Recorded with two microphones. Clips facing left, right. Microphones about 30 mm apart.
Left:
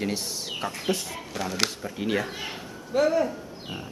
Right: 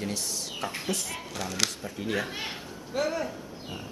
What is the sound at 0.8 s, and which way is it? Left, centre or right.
Speech, centre.